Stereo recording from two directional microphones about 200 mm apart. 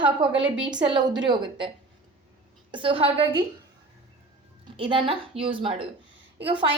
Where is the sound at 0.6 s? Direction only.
20° right (ahead or behind).